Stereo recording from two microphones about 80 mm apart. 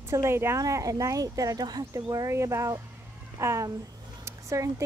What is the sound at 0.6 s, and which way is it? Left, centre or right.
Speech, right.